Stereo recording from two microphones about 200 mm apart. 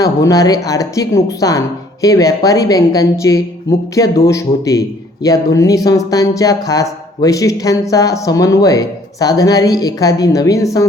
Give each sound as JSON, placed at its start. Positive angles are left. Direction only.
{"t": 0.0, "sound": "a woman's voice", "side_deg": 15}